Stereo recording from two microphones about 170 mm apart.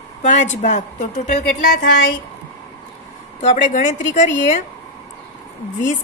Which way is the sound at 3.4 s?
45° left (ahead or behind).